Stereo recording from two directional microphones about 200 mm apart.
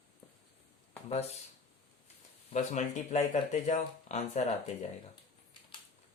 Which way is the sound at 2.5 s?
35° left (ahead or behind).